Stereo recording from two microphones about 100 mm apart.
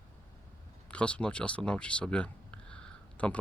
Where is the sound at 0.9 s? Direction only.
10° left (ahead or behind).